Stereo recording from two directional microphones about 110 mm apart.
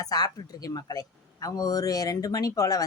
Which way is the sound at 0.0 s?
35° left (ahead or behind).